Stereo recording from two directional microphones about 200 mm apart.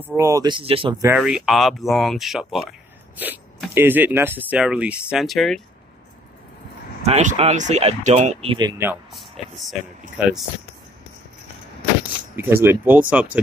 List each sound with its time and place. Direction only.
0.0 s speech: 10° right (ahead or behind); by 0.9 s 25° right (ahead or behind)
1.0 s speech: 5° right (ahead or behind)
7.0 s speech: 35° right (ahead or behind); by 8.9 s 15° right (ahead or behind)
9.1 s speech: centre (ahead or behind)
12.4 s speech: 10° right (ahead or behind)